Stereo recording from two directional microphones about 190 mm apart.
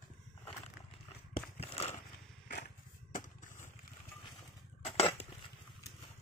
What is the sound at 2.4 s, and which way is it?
Motorcycle, 45° left (ahead or behind).